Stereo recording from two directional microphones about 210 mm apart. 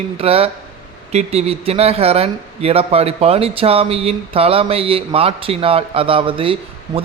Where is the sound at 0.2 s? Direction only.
25° right (ahead or behind).